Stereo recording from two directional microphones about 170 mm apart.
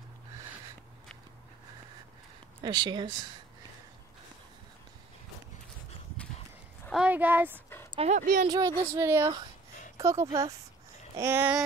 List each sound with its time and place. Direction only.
2.6 s speech: 25° right (ahead or behind)
6.9 s a sound: 5° right (ahead or behind)
7.9 s speech: 35° right (ahead or behind)
8.2 s speech: 55° right (ahead or behind)
8.5 s speech: 20° right (ahead or behind)